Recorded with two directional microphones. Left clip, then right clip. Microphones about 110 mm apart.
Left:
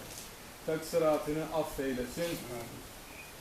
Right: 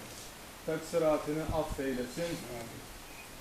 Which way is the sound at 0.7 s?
15° left (ahead or behind).